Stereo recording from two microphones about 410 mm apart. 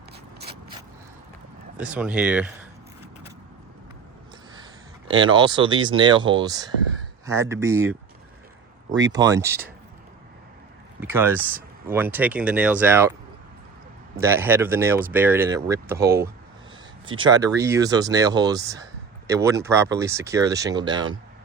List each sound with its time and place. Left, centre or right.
1.8 s speech: centre
5.0 s speech: centre
11.0 s speech: centre
14.2 s speech: centre